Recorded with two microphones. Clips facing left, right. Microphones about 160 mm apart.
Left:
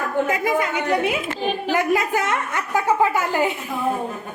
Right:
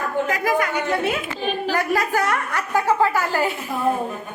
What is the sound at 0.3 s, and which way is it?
A woman's voice, 25° left (ahead or behind).